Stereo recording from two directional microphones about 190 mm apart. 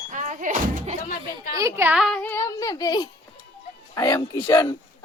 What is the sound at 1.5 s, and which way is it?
A child's voice, 15° right (ahead or behind).